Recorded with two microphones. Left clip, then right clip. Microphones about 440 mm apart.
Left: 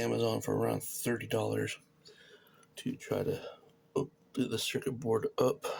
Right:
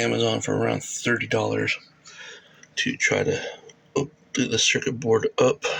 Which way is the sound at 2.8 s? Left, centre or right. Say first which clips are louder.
Right 14 dB; left.